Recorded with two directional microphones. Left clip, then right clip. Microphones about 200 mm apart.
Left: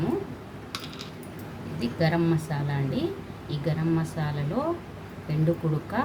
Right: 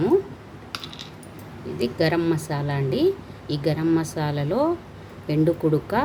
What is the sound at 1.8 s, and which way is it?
Speech, 50° right (ahead or behind).